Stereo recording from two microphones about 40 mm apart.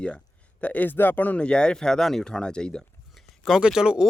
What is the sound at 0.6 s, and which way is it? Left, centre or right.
Speech, left.